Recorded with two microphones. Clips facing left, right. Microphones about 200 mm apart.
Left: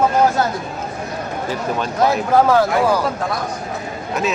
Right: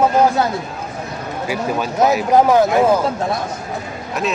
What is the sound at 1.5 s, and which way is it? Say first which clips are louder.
Speech: right 3 dB; 10° right (ahead or behind).